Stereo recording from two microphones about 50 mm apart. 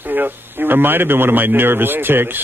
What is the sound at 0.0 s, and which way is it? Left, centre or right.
Speech, right.